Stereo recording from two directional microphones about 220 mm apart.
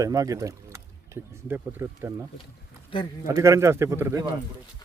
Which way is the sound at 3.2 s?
15° right (ahead or behind).